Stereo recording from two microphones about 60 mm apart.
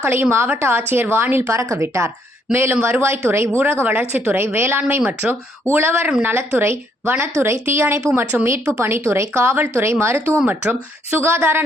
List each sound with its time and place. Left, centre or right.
0.1 s a woman's voice: right
5.0 s speech: right
5.7 s a woman's voice: right
8.8 s a woman's voice: right
10.4 s speech: right
11.2 s speech: right